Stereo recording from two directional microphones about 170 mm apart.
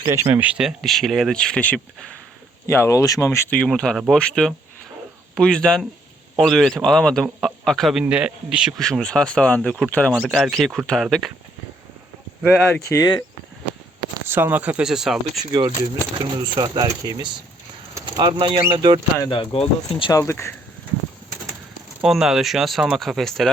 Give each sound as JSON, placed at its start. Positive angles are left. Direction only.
{"t": 0.1, "sound": "a man's voice", "side_deg": -15}
{"t": 3.6, "sound": "a man's voice", "side_deg": 5}
{"t": 12.4, "sound": "a man's voice", "side_deg": 5}
{"t": 12.9, "sound": "speech", "side_deg": 25}
{"t": 14.3, "sound": "speech", "side_deg": -10}
{"t": 16.1, "sound": "speech", "side_deg": -25}
{"t": 19.3, "sound": "speech", "side_deg": 30}
{"t": 20.1, "sound": "speech", "side_deg": 15}
{"t": 22.0, "sound": "a man's voice", "side_deg": 0}